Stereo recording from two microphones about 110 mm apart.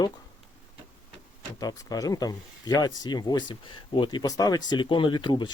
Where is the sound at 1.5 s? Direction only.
35° left (ahead or behind).